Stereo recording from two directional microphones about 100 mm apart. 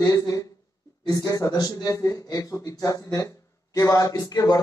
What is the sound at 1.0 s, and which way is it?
A man's voice, 40° left (ahead or behind).